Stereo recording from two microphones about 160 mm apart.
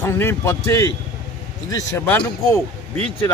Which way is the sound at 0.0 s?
15° left (ahead or behind).